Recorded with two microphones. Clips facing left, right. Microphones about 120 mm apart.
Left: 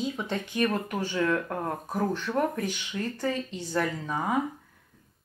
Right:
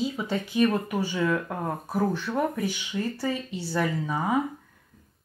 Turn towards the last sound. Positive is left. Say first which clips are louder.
# right 2 dB
turn(degrees=-10)  # may be behind; listen again after turning